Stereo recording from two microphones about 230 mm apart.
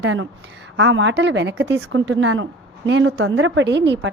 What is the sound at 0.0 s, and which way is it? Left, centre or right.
A woman's voice, right.